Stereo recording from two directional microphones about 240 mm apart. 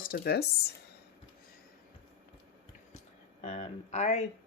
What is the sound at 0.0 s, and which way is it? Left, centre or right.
Speech, left.